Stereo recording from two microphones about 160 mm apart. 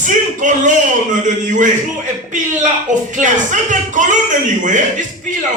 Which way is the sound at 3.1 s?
50° right (ahead or behind).